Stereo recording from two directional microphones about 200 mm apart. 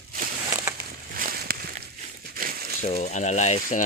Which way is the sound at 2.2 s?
50° right (ahead or behind).